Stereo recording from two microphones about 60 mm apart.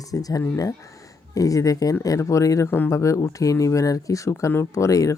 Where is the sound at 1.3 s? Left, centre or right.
Left.